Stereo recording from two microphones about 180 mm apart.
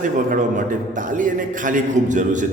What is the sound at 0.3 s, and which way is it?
A man's voice, 45° right (ahead or behind).